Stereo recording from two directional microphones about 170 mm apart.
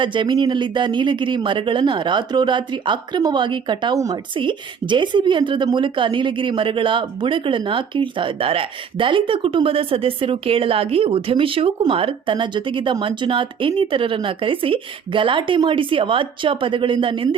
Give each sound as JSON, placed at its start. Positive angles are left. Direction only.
{"t": 0.0, "sound": "a woman's voice", "side_deg": -30}